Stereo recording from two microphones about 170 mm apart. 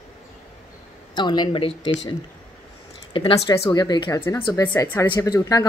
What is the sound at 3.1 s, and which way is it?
Speech, 30° left (ahead or behind).